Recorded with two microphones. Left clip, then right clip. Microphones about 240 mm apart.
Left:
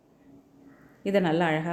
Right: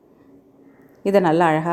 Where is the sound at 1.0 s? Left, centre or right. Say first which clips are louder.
Right 9 dB; right.